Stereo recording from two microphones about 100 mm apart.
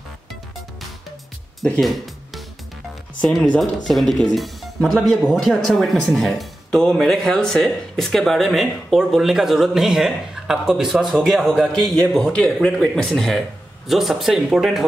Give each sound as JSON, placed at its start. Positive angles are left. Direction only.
{"t": 1.6, "sound": "music", "side_deg": 0}
{"t": 3.2, "sound": "speech", "side_deg": 10}